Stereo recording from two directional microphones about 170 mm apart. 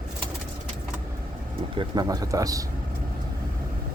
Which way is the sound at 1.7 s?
25° right (ahead or behind).